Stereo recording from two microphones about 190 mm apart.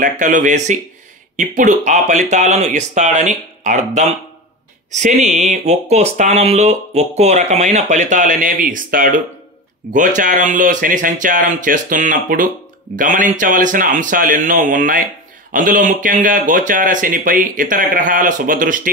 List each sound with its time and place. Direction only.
0.0 s speech: 40° right (ahead or behind)